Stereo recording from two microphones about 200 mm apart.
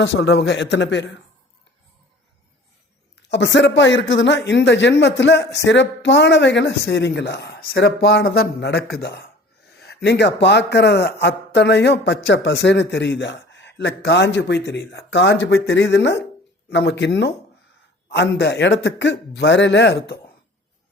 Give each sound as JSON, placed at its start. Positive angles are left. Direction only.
{"t": 0.0, "sound": "speech", "side_deg": 65}
{"t": 3.2, "sound": "speech", "side_deg": 60}